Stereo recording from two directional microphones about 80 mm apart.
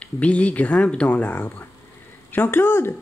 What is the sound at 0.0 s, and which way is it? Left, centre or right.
Speech, centre.